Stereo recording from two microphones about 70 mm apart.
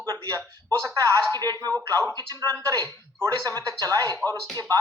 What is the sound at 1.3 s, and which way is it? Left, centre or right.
Speech, right.